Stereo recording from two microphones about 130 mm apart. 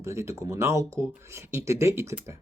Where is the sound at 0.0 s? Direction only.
20° right (ahead or behind).